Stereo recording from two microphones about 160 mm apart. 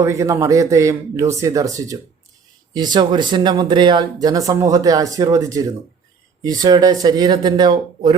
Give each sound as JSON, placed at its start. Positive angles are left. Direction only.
{"t": 0.0, "sound": "speech", "side_deg": -20}